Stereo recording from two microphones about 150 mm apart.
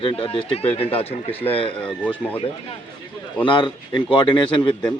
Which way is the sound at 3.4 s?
30° left (ahead or behind).